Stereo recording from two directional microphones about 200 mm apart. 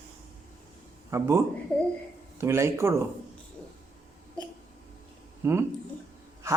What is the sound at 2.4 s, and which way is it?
Speech, 15° right (ahead or behind).